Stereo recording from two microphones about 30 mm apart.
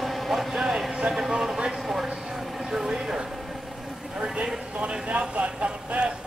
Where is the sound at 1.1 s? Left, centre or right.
Right.